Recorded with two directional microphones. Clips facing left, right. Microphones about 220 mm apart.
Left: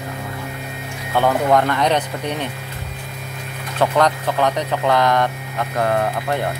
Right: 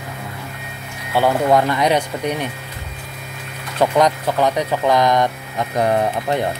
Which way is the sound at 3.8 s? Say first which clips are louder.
Right 2 dB; 10° right (ahead or behind).